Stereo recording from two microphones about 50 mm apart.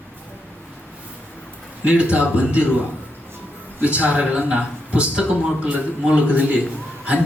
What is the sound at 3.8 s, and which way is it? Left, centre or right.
A man's voice, right.